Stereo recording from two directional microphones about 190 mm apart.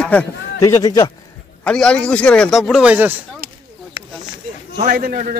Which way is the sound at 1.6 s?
5° left (ahead or behind).